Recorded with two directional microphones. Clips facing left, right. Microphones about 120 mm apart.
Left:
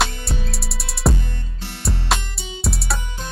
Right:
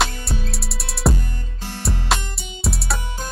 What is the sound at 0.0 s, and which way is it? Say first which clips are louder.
Music: even; centre (ahead or behind).